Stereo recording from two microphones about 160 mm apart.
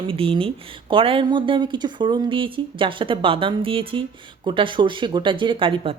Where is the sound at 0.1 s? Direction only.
35° right (ahead or behind).